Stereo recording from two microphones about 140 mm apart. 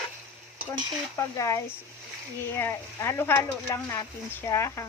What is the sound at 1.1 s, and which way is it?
Speech, 20° left (ahead or behind).